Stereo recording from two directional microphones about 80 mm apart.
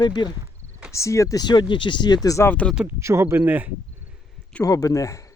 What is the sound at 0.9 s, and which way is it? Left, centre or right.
Speech, left.